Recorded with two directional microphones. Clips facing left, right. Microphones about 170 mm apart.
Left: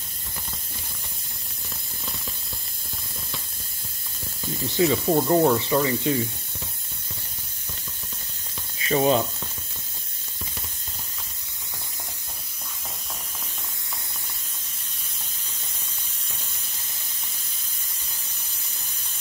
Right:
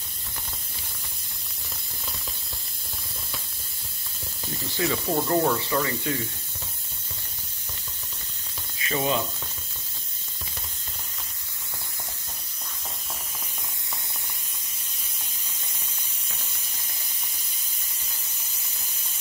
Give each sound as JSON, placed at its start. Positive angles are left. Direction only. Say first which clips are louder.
{"t": 4.7, "sound": "speech", "louder": "left 5 dB", "side_deg": 20}
{"t": 8.8, "sound": "speech", "louder": "left 6 dB", "side_deg": 35}